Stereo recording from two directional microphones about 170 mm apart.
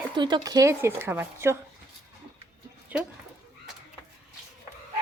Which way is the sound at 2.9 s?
10° right (ahead or behind).